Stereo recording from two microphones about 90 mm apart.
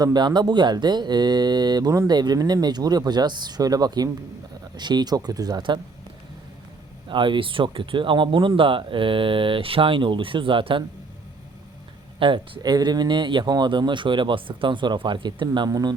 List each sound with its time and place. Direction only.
0.0 s speech: 50° right (ahead or behind)
7.1 s speech: 65° right (ahead or behind)
12.2 s speech: 55° right (ahead or behind)